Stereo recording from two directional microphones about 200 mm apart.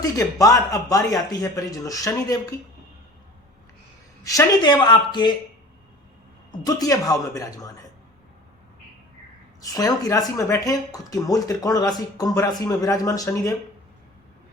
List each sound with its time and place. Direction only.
0.0 s speech: 15° left (ahead or behind)
4.2 s speech: 15° left (ahead or behind)
6.5 s speech: 20° left (ahead or behind)
9.6 s speech: 20° left (ahead or behind)